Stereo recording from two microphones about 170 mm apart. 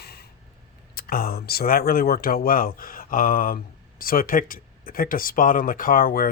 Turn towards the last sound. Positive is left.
turn(degrees=60)  # may be behind; listen again after turning